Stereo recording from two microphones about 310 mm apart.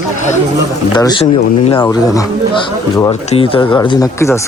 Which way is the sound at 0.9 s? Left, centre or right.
Centre.